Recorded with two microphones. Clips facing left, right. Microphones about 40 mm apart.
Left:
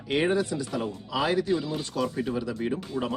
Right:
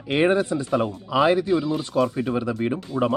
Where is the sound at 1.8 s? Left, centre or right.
Right.